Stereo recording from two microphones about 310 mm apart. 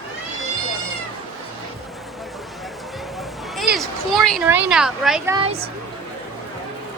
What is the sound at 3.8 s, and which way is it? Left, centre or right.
Speech, centre.